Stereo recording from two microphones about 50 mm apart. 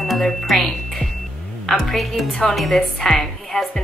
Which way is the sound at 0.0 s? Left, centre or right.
Centre.